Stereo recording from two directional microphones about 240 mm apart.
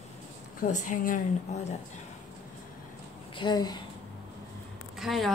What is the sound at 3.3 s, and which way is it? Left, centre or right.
Speech, centre.